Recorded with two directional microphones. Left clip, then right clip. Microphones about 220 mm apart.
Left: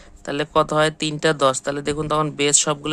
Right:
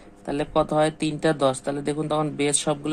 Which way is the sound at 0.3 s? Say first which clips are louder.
Left 4 dB; 30° left (ahead or behind).